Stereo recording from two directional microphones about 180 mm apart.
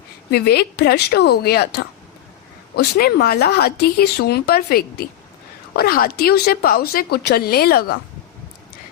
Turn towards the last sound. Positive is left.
turn(degrees=60)  # may be behind; listen again after turning